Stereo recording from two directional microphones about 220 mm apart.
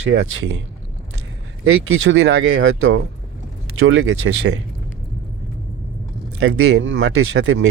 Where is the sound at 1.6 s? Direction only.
70° right (ahead or behind).